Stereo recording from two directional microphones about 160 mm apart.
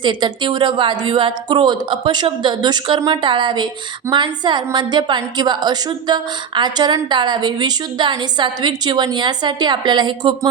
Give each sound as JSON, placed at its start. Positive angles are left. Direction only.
{"t": 0.0, "sound": "a woman's voice", "side_deg": -30}